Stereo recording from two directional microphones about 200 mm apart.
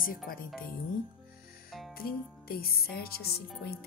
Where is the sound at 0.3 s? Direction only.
45° left (ahead or behind).